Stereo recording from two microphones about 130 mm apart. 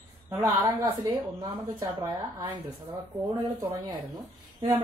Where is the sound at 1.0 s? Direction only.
25° right (ahead or behind).